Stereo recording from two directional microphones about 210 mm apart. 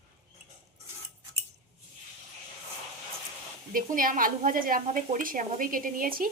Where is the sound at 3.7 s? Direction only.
40° right (ahead or behind).